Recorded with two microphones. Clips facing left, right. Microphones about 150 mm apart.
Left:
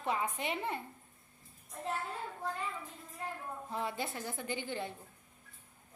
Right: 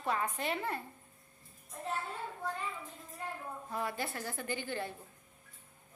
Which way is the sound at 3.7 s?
20° left (ahead or behind).